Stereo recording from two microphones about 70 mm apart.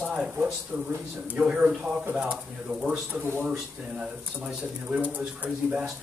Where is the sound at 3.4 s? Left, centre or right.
Centre.